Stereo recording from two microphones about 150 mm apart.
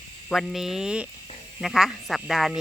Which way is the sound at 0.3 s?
Centre (ahead or behind).